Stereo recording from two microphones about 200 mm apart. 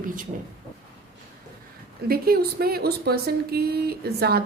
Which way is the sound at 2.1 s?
50° right (ahead or behind).